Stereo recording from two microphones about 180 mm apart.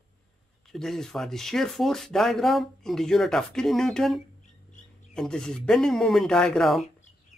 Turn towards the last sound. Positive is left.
turn(degrees=0)  # may be behind; listen again after turning